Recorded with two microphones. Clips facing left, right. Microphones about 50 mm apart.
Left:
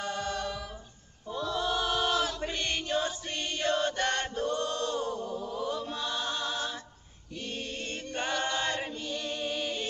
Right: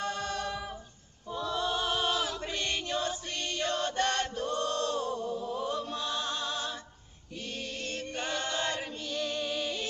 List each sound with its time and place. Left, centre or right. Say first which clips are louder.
0.0 s a capella: even; centre
1.4 s chant: left 1 dB; centre
2.4 s chant: left 1 dB; centre
5.9 s music: even; centre
7.4 s choir: left 1 dB; left
7.8 s chant: left 1 dB; centre
8.9 s music: right 1 dB; centre